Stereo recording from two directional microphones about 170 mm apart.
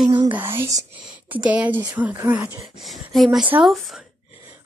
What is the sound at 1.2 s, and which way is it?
Speech, 10° right (ahead or behind).